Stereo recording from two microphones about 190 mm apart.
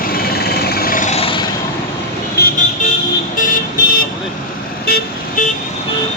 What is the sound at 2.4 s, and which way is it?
Vehicle, 55° left (ahead or behind).